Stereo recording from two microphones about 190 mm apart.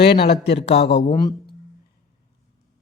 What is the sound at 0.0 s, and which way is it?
Speech, 25° left (ahead or behind).